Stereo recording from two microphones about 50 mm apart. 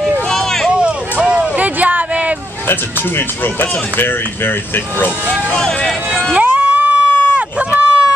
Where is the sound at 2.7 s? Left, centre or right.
Left.